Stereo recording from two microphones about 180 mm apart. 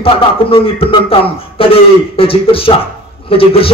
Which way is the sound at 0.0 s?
30° left (ahead or behind).